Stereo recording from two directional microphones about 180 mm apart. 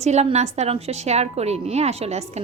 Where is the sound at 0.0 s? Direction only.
35° right (ahead or behind).